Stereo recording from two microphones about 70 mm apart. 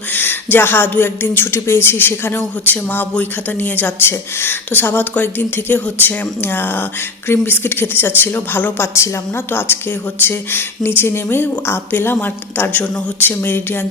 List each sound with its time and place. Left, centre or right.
0.1 s speech: left